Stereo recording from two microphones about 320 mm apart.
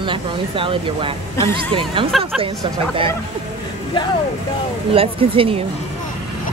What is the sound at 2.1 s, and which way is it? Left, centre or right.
Speech, centre.